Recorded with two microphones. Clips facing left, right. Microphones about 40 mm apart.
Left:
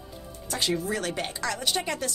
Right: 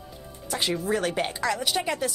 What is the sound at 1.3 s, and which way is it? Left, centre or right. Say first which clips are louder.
Speech: right 3 dB; centre.